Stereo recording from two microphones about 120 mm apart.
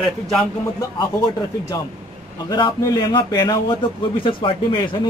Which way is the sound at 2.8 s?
30° left (ahead or behind).